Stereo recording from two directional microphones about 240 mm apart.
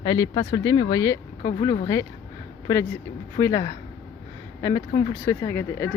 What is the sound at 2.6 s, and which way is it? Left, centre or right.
Speech, centre.